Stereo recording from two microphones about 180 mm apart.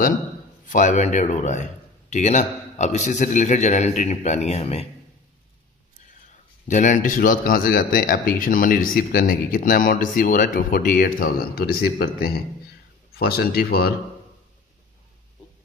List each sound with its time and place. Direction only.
0.7 s a man's voice: 45° left (ahead or behind)
6.7 s speech: 45° left (ahead or behind); by 13.9 s 60° left (ahead or behind)